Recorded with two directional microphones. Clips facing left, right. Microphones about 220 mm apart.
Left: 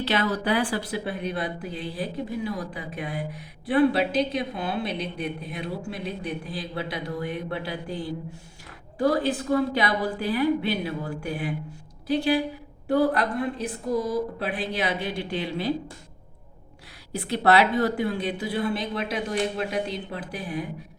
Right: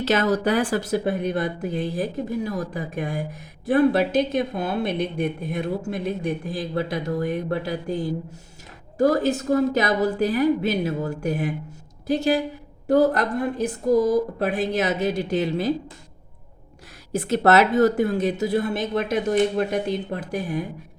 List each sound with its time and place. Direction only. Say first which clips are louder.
0.0 s speech: right 5 dB; 45° right (ahead or behind)
17.1 s speech: right 3 dB; 45° right (ahead or behind)